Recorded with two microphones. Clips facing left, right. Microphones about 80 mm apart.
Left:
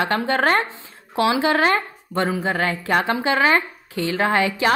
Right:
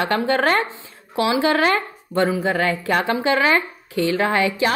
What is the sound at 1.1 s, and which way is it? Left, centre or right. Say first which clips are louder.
Speech: even; left.